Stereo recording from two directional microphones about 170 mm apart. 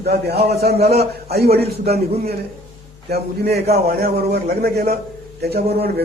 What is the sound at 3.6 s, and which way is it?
A man's voice, 65° right (ahead or behind).